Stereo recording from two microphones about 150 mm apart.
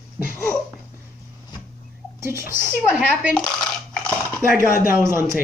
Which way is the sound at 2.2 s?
15° right (ahead or behind).